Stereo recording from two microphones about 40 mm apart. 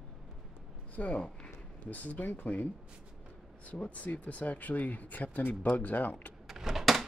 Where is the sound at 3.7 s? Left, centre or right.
Left.